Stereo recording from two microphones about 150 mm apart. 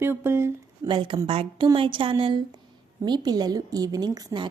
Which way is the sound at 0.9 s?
35° right (ahead or behind).